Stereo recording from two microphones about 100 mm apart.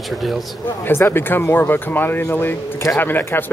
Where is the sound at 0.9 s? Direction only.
20° left (ahead or behind).